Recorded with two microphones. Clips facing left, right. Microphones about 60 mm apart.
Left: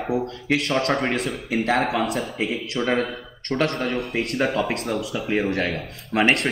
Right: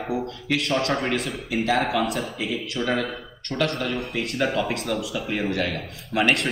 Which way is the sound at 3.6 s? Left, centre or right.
Left.